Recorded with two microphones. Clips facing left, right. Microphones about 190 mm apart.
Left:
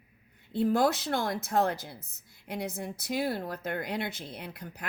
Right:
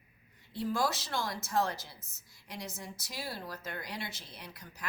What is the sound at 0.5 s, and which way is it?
A woman's voice, 55° left (ahead or behind).